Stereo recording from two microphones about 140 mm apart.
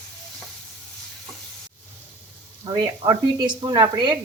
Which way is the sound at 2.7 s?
25° right (ahead or behind).